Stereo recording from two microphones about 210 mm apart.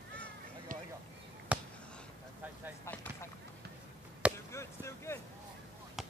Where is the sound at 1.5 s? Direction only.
5° right (ahead or behind).